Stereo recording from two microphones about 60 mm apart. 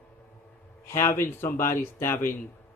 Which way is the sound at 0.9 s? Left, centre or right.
Left.